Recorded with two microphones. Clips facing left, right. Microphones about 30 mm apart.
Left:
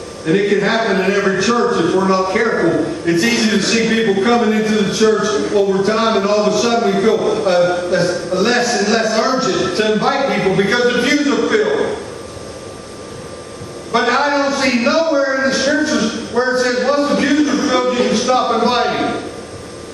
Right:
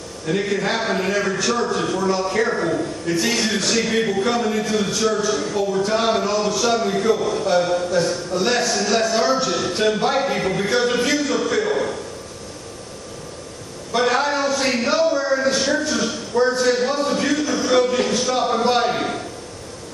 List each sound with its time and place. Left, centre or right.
0.2 s a man's voice: left
13.9 s a man's voice: left